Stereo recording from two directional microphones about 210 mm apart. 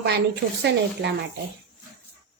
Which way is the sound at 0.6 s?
55° right (ahead or behind).